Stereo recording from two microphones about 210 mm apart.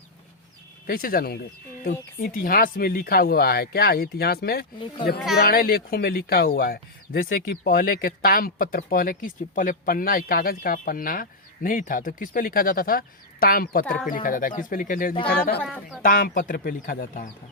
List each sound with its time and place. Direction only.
0.9 s speech: 45° left (ahead or behind)
13.8 s speech: 5° left (ahead or behind)
14.1 s speech: 40° left (ahead or behind)
15.6 s speech: 5° left (ahead or behind)
16.0 s speech: 40° left (ahead or behind)